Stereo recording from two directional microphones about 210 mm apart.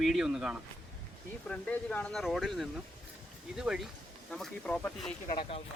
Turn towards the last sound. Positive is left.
turn(degrees=25)  # may be behind; listen again after turning